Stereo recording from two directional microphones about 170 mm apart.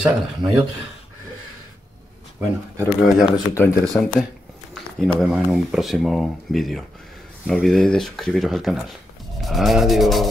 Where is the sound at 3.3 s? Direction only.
15° left (ahead or behind).